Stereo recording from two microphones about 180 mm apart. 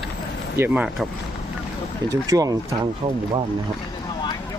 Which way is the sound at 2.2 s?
20° right (ahead or behind).